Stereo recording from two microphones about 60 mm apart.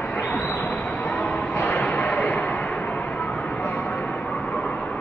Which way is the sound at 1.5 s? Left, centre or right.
Left.